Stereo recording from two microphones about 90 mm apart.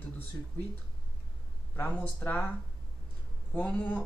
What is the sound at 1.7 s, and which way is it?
Speech, 20° left (ahead or behind).